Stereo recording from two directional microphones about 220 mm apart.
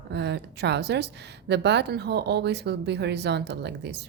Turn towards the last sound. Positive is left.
turn(degrees=-50)  # may be behind; listen again after turning